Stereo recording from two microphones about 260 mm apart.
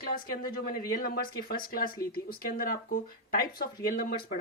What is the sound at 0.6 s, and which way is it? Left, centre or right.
Speech, left.